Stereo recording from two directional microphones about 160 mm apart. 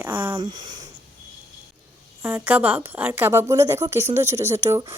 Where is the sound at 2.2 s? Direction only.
10° right (ahead or behind).